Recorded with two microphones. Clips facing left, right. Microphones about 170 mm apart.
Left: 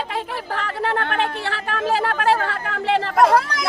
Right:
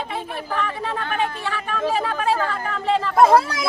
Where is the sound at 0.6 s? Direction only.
75° left (ahead or behind).